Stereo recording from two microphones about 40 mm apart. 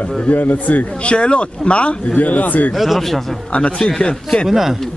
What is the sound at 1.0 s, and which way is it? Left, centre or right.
Speech, left.